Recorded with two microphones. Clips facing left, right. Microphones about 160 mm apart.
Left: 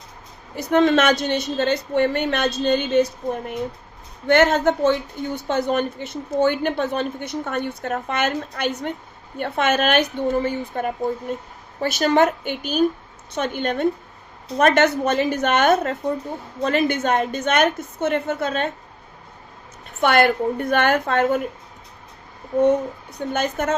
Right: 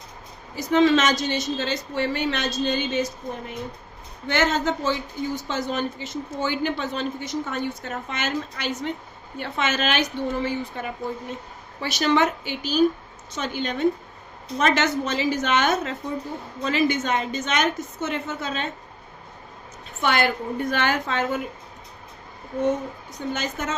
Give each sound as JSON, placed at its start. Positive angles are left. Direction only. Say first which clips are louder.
{"t": 0.5, "sound": "speech", "louder": "left 2 dB", "side_deg": 55}
{"t": 20.0, "sound": "speech", "louder": "left 6 dB", "side_deg": 55}
{"t": 23.1, "sound": "speech", "louder": "left 5 dB", "side_deg": 55}